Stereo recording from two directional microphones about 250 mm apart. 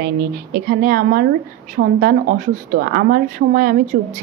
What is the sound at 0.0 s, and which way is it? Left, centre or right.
A woman's voice, right.